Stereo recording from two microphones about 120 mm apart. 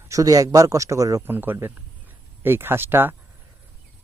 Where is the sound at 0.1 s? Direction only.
30° right (ahead or behind).